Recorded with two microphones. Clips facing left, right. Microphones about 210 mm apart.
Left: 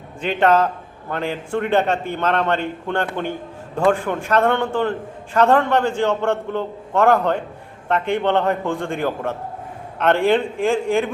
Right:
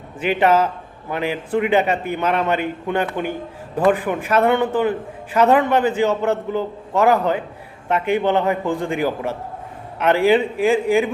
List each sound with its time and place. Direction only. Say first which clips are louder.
0.2 s a man's voice: even; 5° right (ahead or behind)